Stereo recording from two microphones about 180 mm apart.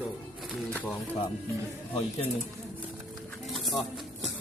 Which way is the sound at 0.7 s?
10° left (ahead or behind).